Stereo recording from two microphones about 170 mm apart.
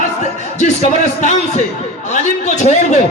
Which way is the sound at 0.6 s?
45° left (ahead or behind).